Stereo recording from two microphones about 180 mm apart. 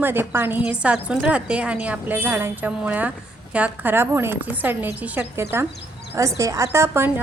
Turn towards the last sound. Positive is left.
turn(degrees=-15)  # may be behind; listen again after turning